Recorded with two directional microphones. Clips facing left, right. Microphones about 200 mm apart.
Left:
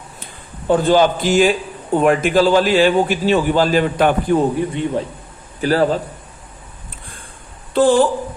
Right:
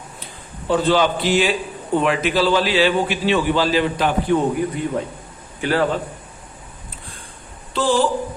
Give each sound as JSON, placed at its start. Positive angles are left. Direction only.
{"t": 0.7, "sound": "a man's voice", "side_deg": 45}
{"t": 4.4, "sound": "a man's voice", "side_deg": 30}
{"t": 5.5, "sound": "a man's voice", "side_deg": 40}
{"t": 7.7, "sound": "speech", "side_deg": 55}